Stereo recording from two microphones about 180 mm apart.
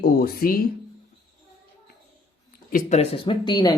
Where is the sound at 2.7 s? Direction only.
40° left (ahead or behind).